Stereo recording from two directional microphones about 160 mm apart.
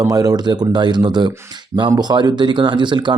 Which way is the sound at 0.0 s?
20° right (ahead or behind).